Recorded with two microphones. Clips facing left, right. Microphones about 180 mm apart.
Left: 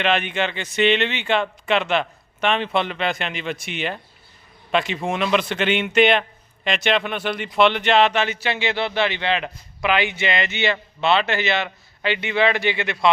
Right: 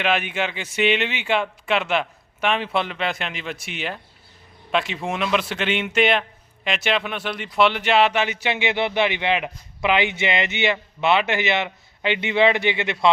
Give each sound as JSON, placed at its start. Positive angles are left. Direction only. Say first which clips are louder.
{"t": 0.0, "sound": "speech", "louder": "left 1 dB", "side_deg": -5}